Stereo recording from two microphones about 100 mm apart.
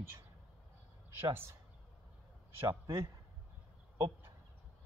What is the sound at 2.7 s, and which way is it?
Speech, 30° right (ahead or behind).